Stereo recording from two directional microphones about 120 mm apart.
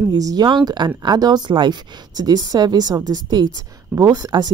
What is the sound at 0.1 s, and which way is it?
Speech, 35° right (ahead or behind).